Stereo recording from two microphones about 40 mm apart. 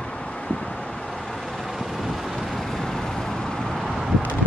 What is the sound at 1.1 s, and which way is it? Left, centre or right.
Vehicle, centre.